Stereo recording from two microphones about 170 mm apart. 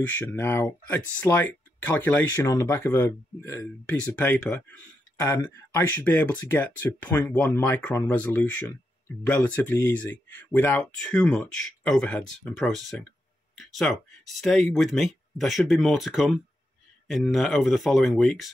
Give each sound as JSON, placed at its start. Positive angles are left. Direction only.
{"t": 0.0, "sound": "speech", "side_deg": 10}
{"t": 5.3, "sound": "speech", "side_deg": 20}
{"t": 5.9, "sound": "speech", "side_deg": 10}